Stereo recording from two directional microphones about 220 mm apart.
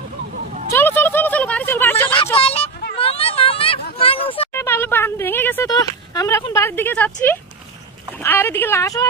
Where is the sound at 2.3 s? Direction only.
25° left (ahead or behind).